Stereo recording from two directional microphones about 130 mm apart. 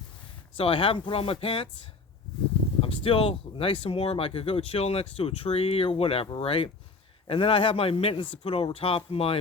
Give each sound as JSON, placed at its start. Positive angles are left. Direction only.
{"t": 0.5, "sound": "speech", "side_deg": 45}
{"t": 2.8, "sound": "speech", "side_deg": 45}